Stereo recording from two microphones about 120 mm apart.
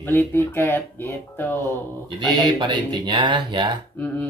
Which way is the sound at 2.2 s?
40° right (ahead or behind).